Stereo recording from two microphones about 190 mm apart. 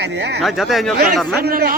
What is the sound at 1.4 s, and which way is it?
Speech, 55° right (ahead or behind).